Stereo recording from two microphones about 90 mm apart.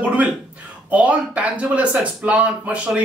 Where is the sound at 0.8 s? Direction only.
15° right (ahead or behind).